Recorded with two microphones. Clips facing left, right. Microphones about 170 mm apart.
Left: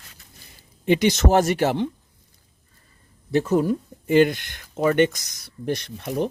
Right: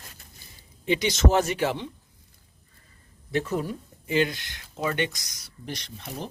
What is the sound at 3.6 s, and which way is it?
Speech, 55° left (ahead or behind).